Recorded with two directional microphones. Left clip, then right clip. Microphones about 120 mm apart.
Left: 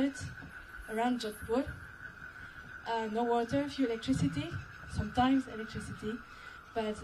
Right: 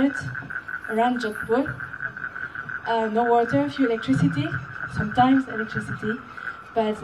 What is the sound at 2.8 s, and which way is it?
Speech, 30° left (ahead or behind).